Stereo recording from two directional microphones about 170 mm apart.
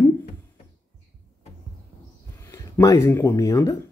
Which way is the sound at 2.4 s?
20° left (ahead or behind).